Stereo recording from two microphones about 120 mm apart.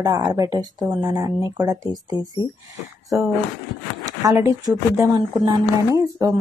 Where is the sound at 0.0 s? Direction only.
30° right (ahead or behind).